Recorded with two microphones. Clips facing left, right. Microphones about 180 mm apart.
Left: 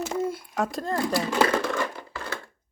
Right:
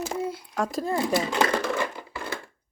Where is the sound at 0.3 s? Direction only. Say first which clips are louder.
Left 2 dB; 50° left (ahead or behind).